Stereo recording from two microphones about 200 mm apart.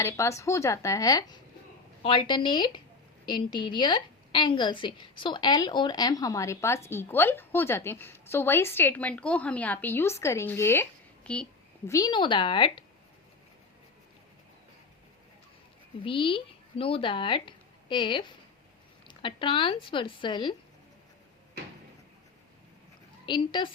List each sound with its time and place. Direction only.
0.0 s a woman's voice: 15° left (ahead or behind)
11.9 s speech: 20° left (ahead or behind)
16.0 s speech: 25° left (ahead or behind)
23.2 s speech: 25° left (ahead or behind)